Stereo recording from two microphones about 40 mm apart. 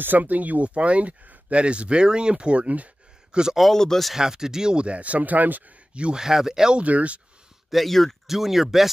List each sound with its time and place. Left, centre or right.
0.0 s speech: right
1.6 s speech: right
3.3 s a sound: right
3.7 s speech: centre
4.1 s speech: centre; by 5.6 s right
6.1 s speech: centre
6.7 s speech: right
7.7 s speech: centre
8.3 s speech: centre